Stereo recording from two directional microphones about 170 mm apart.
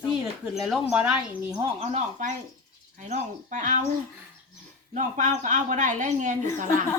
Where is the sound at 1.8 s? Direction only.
40° right (ahead or behind).